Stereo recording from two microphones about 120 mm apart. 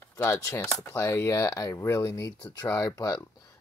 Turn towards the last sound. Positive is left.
turn(degrees=25)  # may be behind; listen again after turning